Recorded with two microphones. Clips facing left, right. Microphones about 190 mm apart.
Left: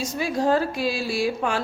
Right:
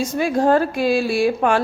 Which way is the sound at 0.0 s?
55° right (ahead or behind).